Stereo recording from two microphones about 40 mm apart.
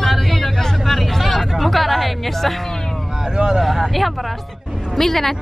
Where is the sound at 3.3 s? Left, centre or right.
Centre.